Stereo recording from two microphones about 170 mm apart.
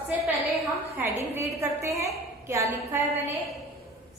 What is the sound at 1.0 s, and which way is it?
A woman's voice, 10° right (ahead or behind).